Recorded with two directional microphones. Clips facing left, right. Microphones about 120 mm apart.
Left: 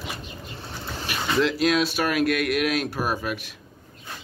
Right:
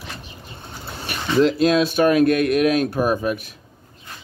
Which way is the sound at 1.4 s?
35° right (ahead or behind).